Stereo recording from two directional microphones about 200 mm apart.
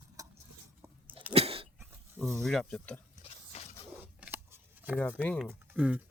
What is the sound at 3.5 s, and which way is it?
Printer, 30° left (ahead or behind).